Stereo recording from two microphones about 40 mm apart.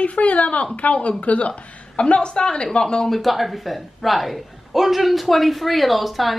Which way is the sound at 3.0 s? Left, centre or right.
Centre.